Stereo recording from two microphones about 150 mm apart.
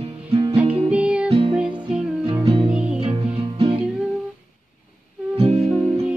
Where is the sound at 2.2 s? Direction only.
35° right (ahead or behind).